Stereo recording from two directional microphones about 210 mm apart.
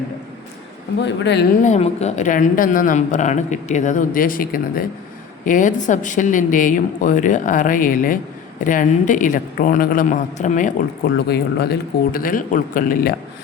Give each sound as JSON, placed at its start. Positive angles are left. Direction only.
{"t": 1.0, "sound": "speech", "side_deg": 55}
{"t": 1.6, "sound": "a man's voice", "side_deg": 30}